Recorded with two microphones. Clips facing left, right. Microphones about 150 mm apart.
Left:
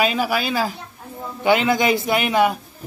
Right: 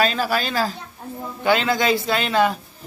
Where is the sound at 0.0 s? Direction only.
10° left (ahead or behind).